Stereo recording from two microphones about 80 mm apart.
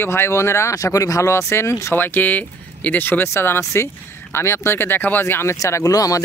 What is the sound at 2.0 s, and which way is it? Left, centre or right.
Speech, left.